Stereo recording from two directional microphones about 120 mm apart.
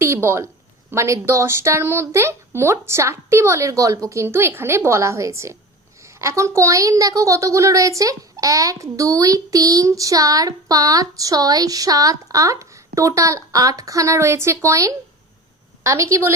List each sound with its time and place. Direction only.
0.0 s a woman's voice: 20° right (ahead or behind)